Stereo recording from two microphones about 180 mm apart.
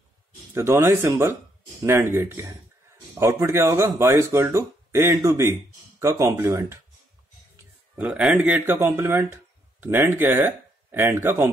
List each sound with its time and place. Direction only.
0.6 s speech: 15° right (ahead or behind)
8.0 s speech: 5° right (ahead or behind)